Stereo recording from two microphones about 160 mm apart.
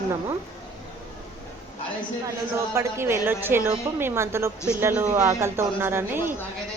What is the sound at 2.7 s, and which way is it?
A woman's voice, 15° right (ahead or behind).